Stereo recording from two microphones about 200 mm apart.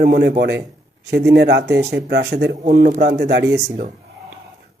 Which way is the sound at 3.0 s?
55° right (ahead or behind).